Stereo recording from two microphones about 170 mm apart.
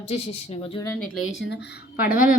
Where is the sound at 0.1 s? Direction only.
40° left (ahead or behind).